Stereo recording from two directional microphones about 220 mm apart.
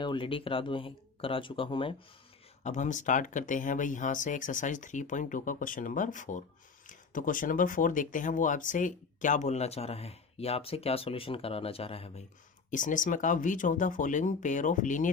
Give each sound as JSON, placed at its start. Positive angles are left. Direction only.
{"t": 0.0, "sound": "speech", "side_deg": 20}